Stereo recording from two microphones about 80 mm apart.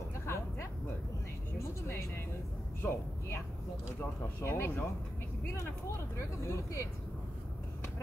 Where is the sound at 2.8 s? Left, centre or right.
Left.